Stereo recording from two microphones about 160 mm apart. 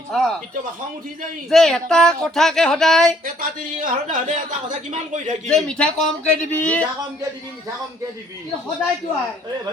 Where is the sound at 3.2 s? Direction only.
60° right (ahead or behind).